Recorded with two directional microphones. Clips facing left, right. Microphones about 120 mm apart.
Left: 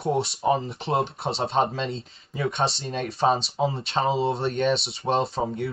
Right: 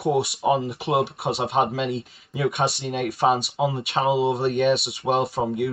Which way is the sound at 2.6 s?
25° left (ahead or behind).